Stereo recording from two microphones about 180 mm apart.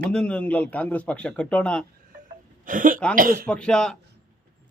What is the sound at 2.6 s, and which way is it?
Speech, 50° right (ahead or behind).